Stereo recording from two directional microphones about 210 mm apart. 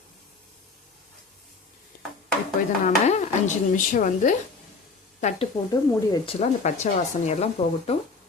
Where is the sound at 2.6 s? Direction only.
40° left (ahead or behind).